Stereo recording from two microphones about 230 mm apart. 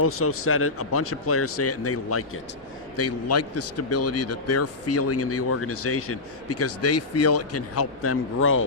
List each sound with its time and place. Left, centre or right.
0.0 s speech: left
2.9 s a man's voice: left